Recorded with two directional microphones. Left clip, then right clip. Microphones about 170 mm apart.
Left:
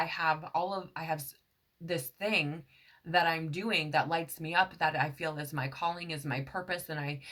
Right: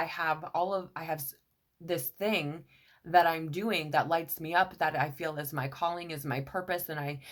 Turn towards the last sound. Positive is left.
turn(degrees=-35)  # may be behind; listen again after turning